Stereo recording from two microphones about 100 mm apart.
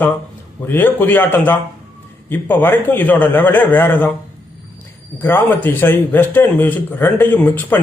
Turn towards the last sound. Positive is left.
turn(degrees=20)  # may be behind; listen again after turning